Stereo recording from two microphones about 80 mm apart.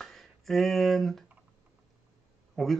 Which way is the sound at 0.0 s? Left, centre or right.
Centre.